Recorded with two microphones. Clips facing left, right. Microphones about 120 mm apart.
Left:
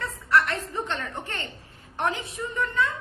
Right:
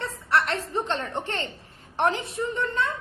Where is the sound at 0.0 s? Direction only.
30° right (ahead or behind).